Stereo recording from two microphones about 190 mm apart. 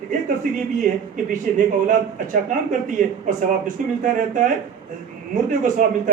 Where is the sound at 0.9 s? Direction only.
40° right (ahead or behind).